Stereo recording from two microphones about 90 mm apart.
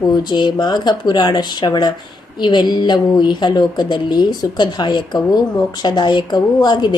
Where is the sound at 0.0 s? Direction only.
55° left (ahead or behind).